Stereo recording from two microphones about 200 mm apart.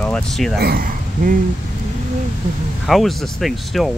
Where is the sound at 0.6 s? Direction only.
50° right (ahead or behind).